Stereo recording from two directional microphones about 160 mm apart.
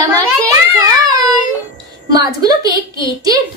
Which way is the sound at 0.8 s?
20° right (ahead or behind).